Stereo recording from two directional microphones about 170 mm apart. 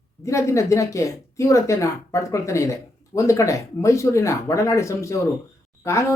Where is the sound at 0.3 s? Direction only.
15° left (ahead or behind).